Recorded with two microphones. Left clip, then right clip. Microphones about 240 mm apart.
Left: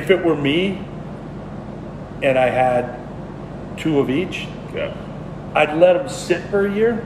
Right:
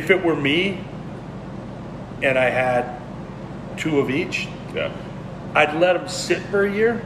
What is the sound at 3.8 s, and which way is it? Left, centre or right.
Speech, centre.